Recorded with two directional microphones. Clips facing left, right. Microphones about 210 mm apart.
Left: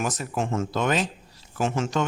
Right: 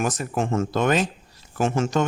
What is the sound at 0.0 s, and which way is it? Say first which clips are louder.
Speech: right 3 dB; 50° right (ahead or behind).